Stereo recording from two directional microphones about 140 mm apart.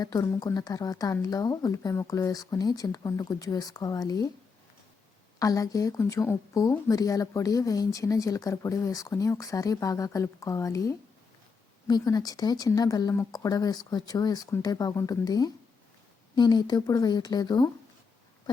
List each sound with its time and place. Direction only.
0.0 s speech: 25° left (ahead or behind)
5.4 s speech: 25° left (ahead or behind)